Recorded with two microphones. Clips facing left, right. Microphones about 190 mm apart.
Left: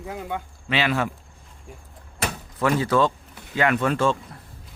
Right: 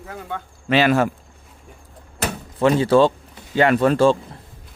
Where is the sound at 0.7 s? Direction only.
45° right (ahead or behind).